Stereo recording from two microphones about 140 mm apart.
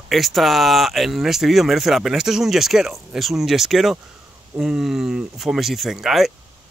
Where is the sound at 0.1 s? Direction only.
Centre (ahead or behind).